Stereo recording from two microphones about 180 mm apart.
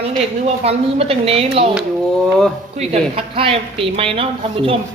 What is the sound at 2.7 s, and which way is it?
A woman's voice, 35° right (ahead or behind).